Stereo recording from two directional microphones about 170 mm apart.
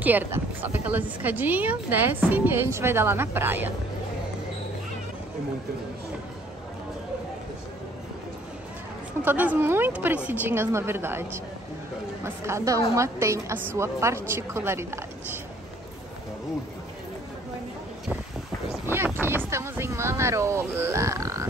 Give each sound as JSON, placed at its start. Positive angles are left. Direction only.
{"t": 0.0, "sound": "speech", "side_deg": -10}
{"t": 9.2, "sound": "speech", "side_deg": -10}
{"t": 18.9, "sound": "a sound", "side_deg": -10}